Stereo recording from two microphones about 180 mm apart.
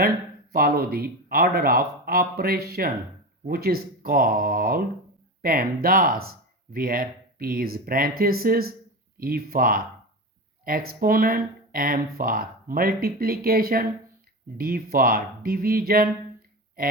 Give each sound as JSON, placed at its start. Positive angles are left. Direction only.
{"t": 0.5, "sound": "speech", "side_deg": -55}